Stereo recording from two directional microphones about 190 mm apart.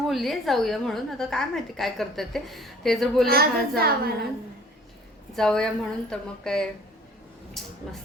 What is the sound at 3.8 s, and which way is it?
Speech, 55° right (ahead or behind).